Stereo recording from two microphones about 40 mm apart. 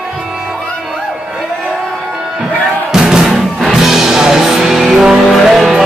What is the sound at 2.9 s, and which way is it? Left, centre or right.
Music, centre.